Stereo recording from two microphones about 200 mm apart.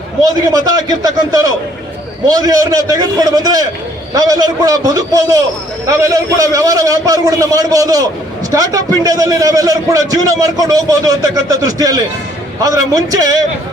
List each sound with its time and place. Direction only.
0.2 s a man's voice: 20° right (ahead or behind)